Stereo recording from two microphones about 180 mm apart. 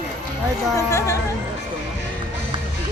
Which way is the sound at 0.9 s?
15° left (ahead or behind).